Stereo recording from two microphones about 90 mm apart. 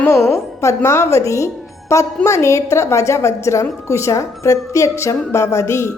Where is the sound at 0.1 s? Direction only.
35° left (ahead or behind).